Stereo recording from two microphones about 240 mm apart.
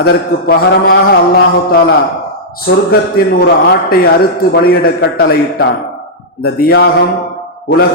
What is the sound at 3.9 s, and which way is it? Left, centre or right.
A man's voice, left.